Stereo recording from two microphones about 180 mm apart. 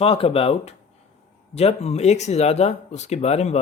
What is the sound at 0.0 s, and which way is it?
Speech, 35° left (ahead or behind).